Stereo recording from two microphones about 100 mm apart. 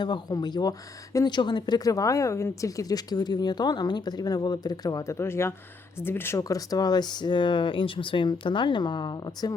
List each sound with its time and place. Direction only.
0.0 s speech: 45° left (ahead or behind)